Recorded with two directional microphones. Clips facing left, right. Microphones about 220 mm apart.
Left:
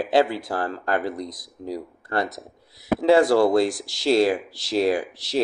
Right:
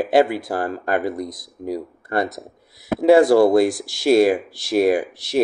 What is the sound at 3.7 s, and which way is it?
Speech, 50° right (ahead or behind).